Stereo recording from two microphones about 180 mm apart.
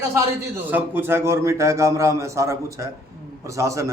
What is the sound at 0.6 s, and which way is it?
A man's voice, 10° right (ahead or behind).